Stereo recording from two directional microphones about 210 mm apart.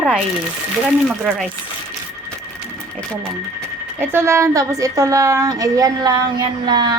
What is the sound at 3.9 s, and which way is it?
A woman's voice, 10° right (ahead or behind).